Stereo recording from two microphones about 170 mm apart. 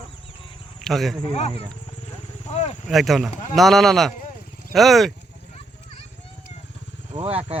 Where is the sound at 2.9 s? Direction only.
Centre (ahead or behind).